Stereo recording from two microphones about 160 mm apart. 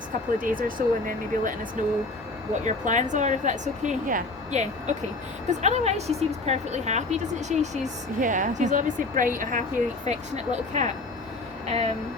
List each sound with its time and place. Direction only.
0.3 s speech: 60° right (ahead or behind)
10.1 s speech: 45° right (ahead or behind)